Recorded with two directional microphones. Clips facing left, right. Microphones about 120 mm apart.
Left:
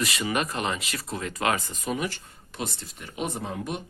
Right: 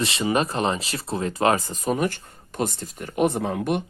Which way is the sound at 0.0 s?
30° right (ahead or behind).